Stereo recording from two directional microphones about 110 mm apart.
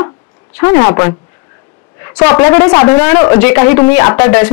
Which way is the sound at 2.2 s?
20° left (ahead or behind).